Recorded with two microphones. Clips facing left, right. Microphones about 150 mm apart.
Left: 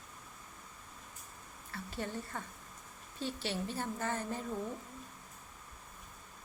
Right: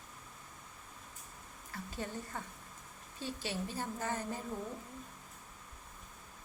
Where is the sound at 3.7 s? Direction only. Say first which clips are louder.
Left 1 dB; 15° right (ahead or behind).